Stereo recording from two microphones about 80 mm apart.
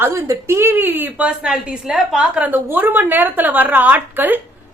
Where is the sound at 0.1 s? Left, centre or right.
Right.